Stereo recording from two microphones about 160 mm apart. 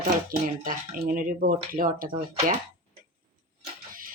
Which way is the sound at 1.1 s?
60° right (ahead or behind).